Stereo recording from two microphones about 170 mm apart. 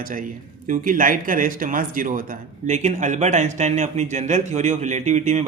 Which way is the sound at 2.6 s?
45° right (ahead or behind).